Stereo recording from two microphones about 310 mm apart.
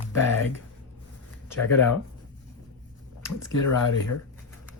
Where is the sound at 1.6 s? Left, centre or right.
Left.